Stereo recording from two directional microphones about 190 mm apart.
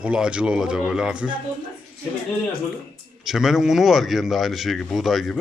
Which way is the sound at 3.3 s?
Centre (ahead or behind).